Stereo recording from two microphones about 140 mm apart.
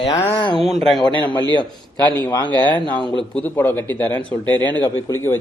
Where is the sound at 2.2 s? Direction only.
25° left (ahead or behind).